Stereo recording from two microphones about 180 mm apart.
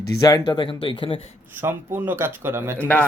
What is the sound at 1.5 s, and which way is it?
Speech, 10° right (ahead or behind).